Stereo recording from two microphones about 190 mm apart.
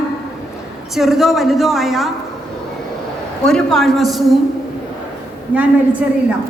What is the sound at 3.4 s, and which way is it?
Speech, 5° left (ahead or behind).